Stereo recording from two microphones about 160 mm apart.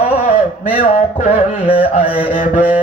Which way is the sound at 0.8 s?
40° left (ahead or behind).